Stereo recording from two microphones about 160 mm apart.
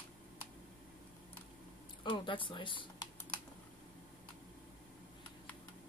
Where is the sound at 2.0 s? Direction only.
30° left (ahead or behind).